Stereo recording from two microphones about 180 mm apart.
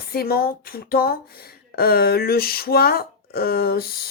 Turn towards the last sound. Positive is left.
turn(degrees=60)  # may be behind; listen again after turning